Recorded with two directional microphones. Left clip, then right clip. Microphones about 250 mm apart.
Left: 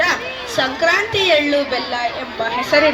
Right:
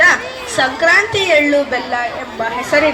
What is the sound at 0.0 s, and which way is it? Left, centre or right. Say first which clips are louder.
A child's voice: right 6 dB; left.